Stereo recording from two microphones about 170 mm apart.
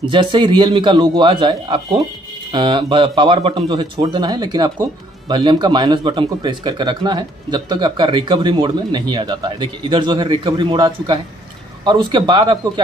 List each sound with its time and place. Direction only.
0.1 s a man's voice: 30° right (ahead or behind)